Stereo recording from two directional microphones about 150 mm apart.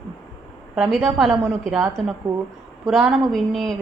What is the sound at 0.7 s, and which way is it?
A woman's voice, 5° right (ahead or behind).